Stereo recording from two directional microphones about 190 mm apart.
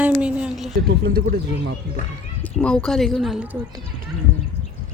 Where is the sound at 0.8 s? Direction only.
50° right (ahead or behind).